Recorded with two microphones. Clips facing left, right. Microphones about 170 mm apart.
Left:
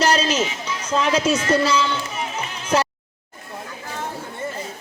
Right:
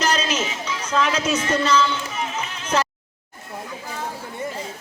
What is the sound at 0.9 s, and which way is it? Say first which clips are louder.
Speech: left 2 dB; 30° left (ahead or behind).